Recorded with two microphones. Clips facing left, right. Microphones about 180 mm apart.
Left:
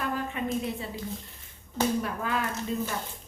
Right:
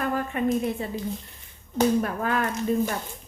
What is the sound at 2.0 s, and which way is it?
Speech, 50° right (ahead or behind).